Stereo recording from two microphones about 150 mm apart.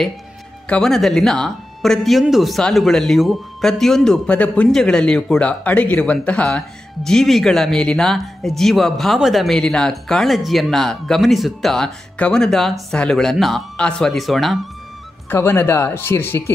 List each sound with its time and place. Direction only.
0.7 s speech: 5° left (ahead or behind)
15.2 s speech: 15° left (ahead or behind)